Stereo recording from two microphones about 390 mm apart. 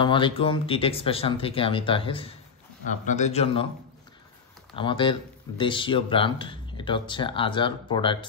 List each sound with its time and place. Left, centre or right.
0.0 s speech: centre
4.7 s speech: centre